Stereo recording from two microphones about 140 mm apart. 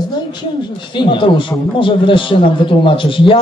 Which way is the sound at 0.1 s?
30° left (ahead or behind).